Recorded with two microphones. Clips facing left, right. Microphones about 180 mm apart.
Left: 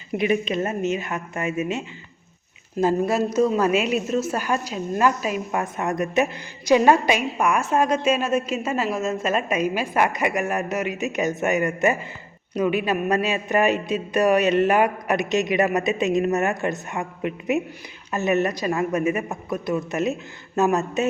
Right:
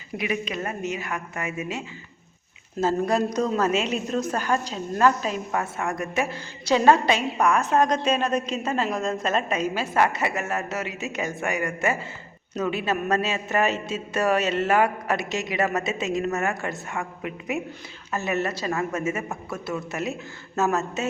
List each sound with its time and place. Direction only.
0.2 s a woman's voice: 25° left (ahead or behind)
2.8 s a woman's voice: 5° left (ahead or behind)